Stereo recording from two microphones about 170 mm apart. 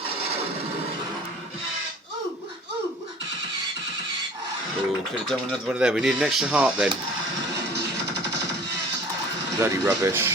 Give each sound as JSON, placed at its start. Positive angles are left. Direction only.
{"t": 5.3, "sound": "speech", "side_deg": 0}
{"t": 9.6, "sound": "speech", "side_deg": -20}